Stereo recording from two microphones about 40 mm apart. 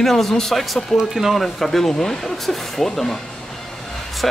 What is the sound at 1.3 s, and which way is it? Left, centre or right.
Speech, centre.